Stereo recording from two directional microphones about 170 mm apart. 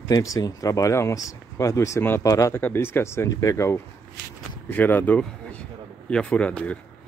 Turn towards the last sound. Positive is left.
turn(degrees=5)  # may be behind; listen again after turning